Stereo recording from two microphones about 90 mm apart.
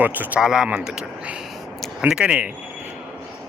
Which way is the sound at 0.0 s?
20° right (ahead or behind).